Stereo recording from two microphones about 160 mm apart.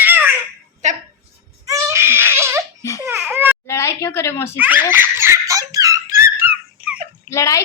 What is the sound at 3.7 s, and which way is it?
Speech, 15° left (ahead or behind).